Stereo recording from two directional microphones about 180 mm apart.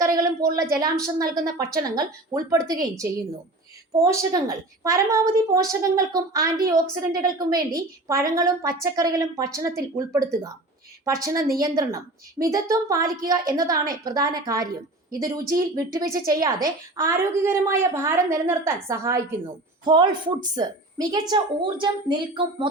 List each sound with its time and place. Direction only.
0.0 s a sound: 20° right (ahead or behind)
0.8 s a woman's voice: 20° right (ahead or behind)
4.0 s a woman's voice: 20° right (ahead or behind)